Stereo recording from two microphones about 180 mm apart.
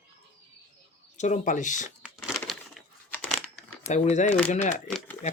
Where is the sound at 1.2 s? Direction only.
45° left (ahead or behind).